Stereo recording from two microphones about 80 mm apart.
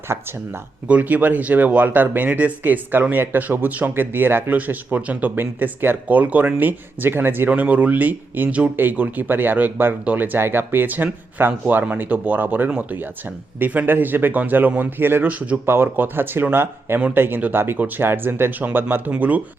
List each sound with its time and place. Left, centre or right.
0.1 s speech: right
0.9 s speech: centre